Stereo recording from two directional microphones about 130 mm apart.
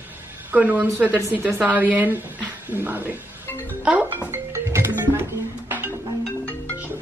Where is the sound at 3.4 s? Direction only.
20° left (ahead or behind).